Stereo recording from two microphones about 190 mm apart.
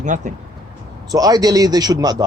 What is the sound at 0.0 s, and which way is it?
Speech, 40° right (ahead or behind).